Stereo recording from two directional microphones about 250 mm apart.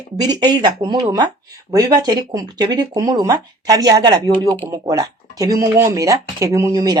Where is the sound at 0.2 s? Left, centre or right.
Centre.